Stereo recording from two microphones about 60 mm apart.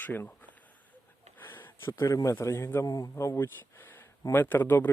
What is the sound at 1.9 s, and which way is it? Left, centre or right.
Speech, left.